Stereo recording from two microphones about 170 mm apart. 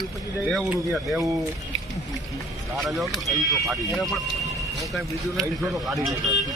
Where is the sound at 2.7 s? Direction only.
Centre (ahead or behind).